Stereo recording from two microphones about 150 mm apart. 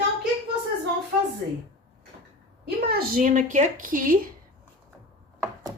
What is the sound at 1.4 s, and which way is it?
Speech, 90° right.